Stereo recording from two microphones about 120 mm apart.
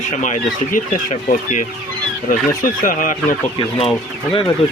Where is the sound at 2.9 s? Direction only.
90° left.